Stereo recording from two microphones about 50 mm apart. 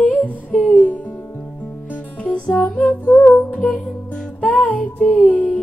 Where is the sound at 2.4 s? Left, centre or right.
Centre.